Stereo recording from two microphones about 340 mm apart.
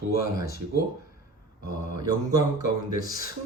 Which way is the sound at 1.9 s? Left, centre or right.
Centre.